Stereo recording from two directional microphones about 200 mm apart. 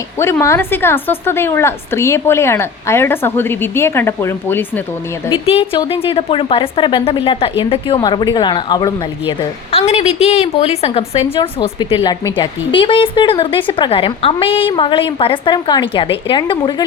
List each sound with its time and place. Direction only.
0.2 s a woman's voice: 15° left (ahead or behind)
5.3 s a woman's voice: 25° left (ahead or behind)